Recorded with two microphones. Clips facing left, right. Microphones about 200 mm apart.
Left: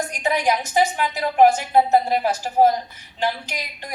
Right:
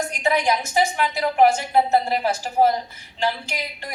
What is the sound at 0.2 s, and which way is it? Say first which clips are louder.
A woman's voice: even; 15° left (ahead or behind).